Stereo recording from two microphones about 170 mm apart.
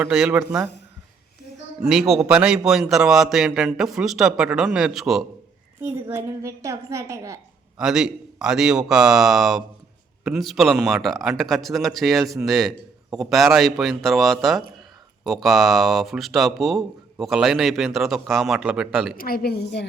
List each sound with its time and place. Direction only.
0.0 s a woman's voice: 10° right (ahead or behind)
1.8 s speech: centre (ahead or behind)
5.8 s a woman's voice: 15° right (ahead or behind)
7.8 s speech: 5° right (ahead or behind)
19.1 s a woman's voice: 60° left (ahead or behind)